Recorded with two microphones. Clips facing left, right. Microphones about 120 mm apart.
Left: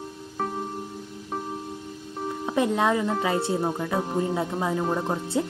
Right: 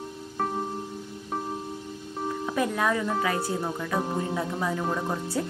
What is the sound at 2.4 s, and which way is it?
Speech, 25° left (ahead or behind).